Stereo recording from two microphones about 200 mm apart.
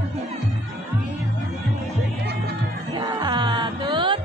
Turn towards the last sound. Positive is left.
turn(degrees=-25)  # may be behind; listen again after turning